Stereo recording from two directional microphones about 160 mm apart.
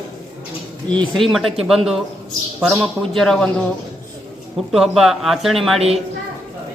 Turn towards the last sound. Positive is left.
turn(degrees=-40)  # may be behind; listen again after turning